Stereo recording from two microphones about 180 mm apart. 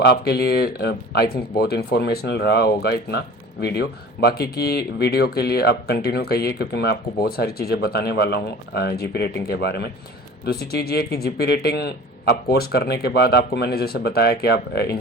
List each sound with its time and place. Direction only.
0.0 s speech: 60° left (ahead or behind)